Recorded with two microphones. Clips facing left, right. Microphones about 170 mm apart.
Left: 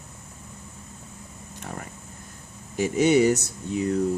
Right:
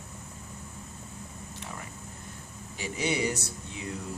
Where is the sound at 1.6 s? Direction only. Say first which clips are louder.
Left 6 dB; 50° left (ahead or behind).